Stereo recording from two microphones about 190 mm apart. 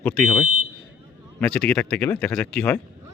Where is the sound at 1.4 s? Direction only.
5° left (ahead or behind).